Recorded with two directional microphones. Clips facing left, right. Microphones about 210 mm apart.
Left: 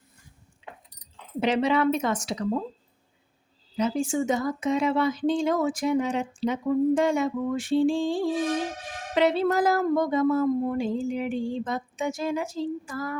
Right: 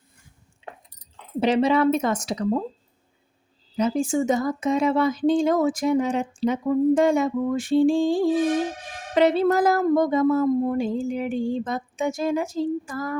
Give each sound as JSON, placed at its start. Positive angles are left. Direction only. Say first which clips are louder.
{"t": 1.4, "sound": "speech", "louder": "right 4 dB", "side_deg": -35}
{"t": 3.8, "sound": "speech", "louder": "right 3 dB", "side_deg": -45}